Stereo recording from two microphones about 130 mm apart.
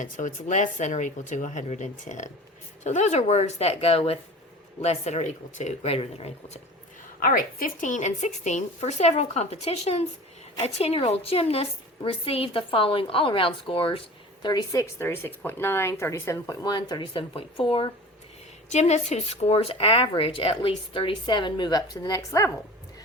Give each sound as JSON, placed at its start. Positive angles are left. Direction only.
{"t": 0.0, "sound": "a woman's voice", "side_deg": 70}
{"t": 7.2, "sound": "a woman's voice", "side_deg": 90}
{"t": 14.4, "sound": "speech", "side_deg": 30}
{"t": 18.7, "sound": "a woman's voice", "side_deg": 60}